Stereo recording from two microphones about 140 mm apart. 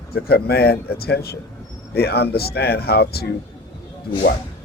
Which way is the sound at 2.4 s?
90° left.